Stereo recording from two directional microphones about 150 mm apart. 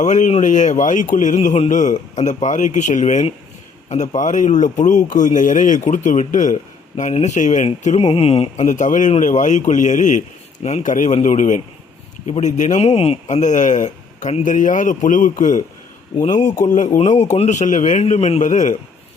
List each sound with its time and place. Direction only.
0.0 s a man's voice: 55° left (ahead or behind)
8.0 s speech: 40° left (ahead or behind)
8.6 s a man's voice: 55° left (ahead or behind)